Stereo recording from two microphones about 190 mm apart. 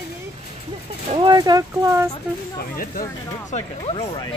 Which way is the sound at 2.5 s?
45° left (ahead or behind).